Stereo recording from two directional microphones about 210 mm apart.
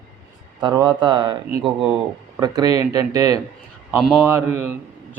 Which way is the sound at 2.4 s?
20° right (ahead or behind).